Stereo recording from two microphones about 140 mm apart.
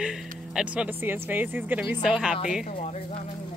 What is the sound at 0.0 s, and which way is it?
Speech, 5° right (ahead or behind).